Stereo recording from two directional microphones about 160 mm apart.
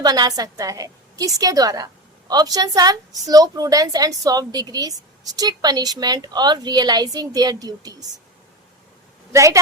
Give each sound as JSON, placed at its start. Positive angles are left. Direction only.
{"t": 0.0, "sound": "a woman's voice", "side_deg": -25}
{"t": 9.3, "sound": "a woman's voice", "side_deg": -20}